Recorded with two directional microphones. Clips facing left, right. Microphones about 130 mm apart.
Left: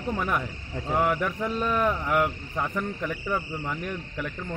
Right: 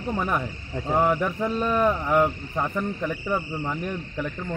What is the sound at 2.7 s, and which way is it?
Speech, 5° right (ahead or behind).